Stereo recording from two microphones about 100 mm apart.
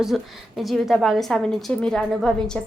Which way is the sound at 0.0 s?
Centre (ahead or behind).